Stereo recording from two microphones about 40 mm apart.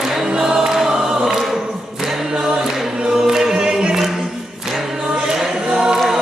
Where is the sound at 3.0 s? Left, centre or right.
Centre.